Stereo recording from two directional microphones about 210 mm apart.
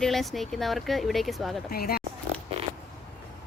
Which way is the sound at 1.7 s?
45° left (ahead or behind).